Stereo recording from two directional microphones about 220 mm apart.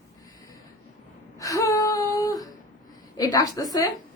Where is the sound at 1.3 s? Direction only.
15° left (ahead or behind).